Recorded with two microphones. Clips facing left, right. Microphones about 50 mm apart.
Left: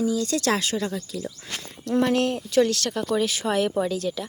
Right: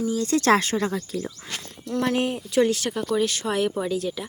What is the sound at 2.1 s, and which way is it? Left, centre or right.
Speech, centre.